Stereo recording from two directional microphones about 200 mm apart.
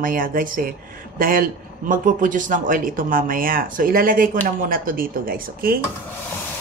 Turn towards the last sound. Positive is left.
turn(degrees=-45)  # may be behind; listen again after turning